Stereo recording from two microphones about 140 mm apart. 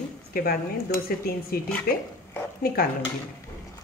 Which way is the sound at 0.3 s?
90° left.